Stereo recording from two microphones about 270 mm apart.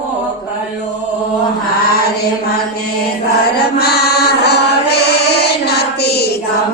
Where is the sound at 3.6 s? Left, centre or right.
Left.